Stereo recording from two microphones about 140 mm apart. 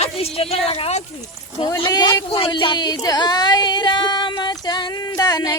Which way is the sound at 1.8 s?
30° left (ahead or behind).